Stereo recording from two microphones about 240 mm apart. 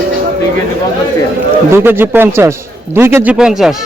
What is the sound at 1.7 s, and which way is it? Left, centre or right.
A man's voice, centre.